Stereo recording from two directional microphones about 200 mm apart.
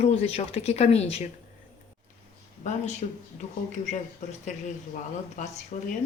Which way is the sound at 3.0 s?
35° left (ahead or behind).